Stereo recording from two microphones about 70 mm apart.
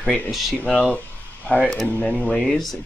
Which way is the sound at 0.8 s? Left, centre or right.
Left.